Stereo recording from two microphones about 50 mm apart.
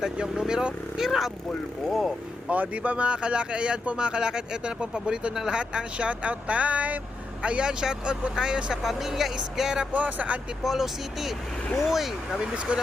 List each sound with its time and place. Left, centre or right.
0.0 s speech: centre
2.5 s speech: right
8.8 s speech: centre
9.9 s speech: right
10.6 s speech: centre
12.5 s speech: right